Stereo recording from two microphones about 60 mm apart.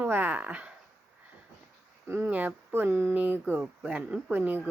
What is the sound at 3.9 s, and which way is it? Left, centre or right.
Speech, right.